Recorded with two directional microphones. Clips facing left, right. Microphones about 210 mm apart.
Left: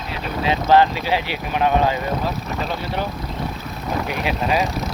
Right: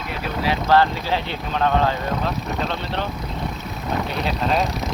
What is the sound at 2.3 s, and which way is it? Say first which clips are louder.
Speech: even; 5° left (ahead or behind).